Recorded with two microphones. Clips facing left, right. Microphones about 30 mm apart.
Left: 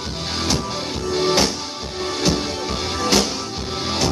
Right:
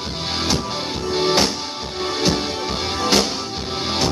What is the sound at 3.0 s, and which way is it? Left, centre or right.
Music, centre.